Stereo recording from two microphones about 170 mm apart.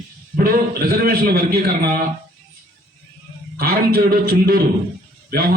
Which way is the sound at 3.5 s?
60° right (ahead or behind).